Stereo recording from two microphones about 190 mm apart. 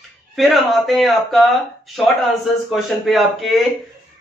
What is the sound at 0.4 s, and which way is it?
A man's voice, centre (ahead or behind).